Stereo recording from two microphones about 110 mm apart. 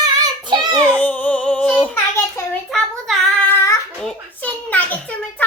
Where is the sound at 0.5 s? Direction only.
40° right (ahead or behind).